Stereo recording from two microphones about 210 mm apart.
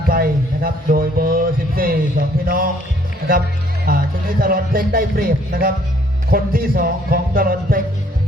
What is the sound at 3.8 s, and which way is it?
Speech, 45° right (ahead or behind).